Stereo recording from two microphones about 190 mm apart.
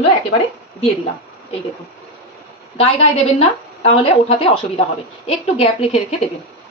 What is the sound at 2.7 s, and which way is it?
A woman's voice, 35° left (ahead or behind).